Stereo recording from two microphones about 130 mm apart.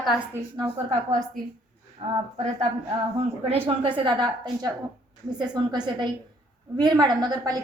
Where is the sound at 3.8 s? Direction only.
40° right (ahead or behind).